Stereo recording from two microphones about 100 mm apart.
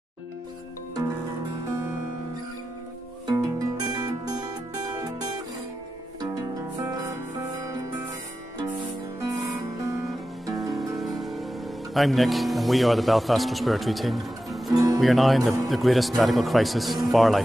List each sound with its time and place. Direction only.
3.3 s music: 40° right (ahead or behind)
9.3 s music: 30° right (ahead or behind)
11.0 s music: centre (ahead or behind)
11.9 s speech: centre (ahead or behind)
14.7 s music: 40° right (ahead or behind)
15.0 s speech: centre (ahead or behind)